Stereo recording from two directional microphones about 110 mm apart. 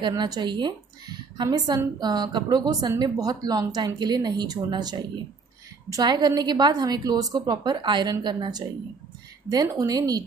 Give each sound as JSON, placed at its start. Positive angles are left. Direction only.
{"t": 0.0, "sound": "a woman's voice", "side_deg": -40}